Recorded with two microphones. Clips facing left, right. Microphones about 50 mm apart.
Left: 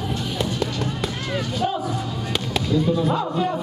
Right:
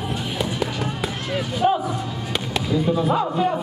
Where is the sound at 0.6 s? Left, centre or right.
Centre.